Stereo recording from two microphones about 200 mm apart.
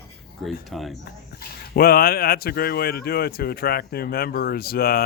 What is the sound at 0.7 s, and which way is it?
Speech, centre (ahead or behind).